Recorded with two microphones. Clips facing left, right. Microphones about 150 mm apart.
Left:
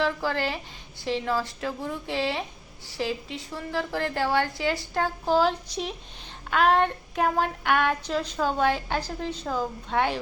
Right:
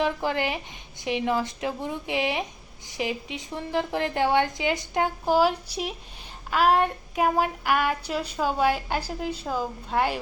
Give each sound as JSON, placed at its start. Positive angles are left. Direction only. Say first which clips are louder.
{"t": 0.0, "sound": "child singing", "louder": "right 1 dB", "side_deg": -20}
{"t": 2.8, "sound": "a woman's voice", "louder": "even", "side_deg": -20}
{"t": 6.5, "sound": "child singing", "louder": "even", "side_deg": -5}